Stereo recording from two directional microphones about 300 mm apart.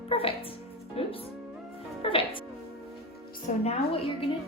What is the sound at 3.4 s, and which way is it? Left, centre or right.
Music, left.